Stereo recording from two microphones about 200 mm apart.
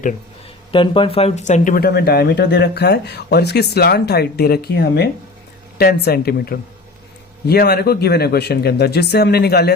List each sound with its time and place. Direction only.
0.7 s speech: 25° left (ahead or behind); by 9.7 s 55° left (ahead or behind)